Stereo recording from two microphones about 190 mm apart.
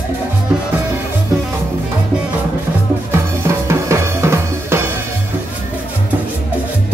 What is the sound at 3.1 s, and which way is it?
Drum, 15° right (ahead or behind).